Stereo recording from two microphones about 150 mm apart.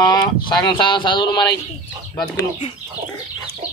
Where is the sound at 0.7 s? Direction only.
30° left (ahead or behind).